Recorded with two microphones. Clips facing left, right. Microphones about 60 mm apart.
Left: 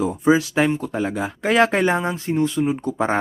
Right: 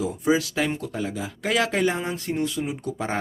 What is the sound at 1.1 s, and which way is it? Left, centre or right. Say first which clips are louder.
Speech: left 6 dB; left.